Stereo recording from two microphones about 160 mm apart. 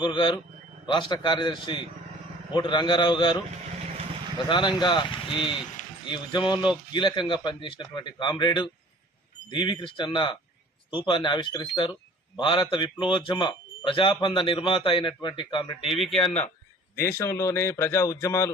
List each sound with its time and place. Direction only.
0.0 s a man's voice: 30° left (ahead or behind)
4.4 s a man's voice: 30° left (ahead or behind)
15.9 s speech: centre (ahead or behind)
17.0 s speech: 20° left (ahead or behind)